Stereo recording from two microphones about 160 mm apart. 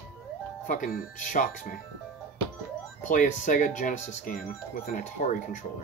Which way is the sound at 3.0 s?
55° left (ahead or behind).